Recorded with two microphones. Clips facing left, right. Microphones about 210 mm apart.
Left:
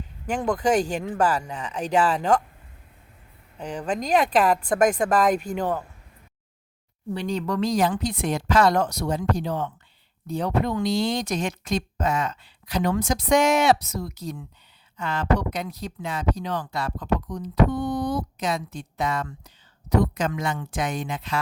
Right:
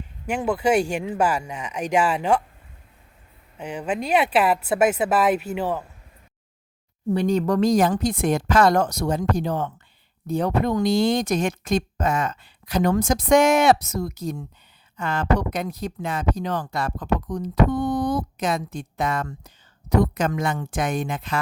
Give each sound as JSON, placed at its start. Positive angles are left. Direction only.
{"t": 0.3, "sound": "speech", "side_deg": -10}
{"t": 3.6, "sound": "speech", "side_deg": -10}
{"t": 7.1, "sound": "speech", "side_deg": -45}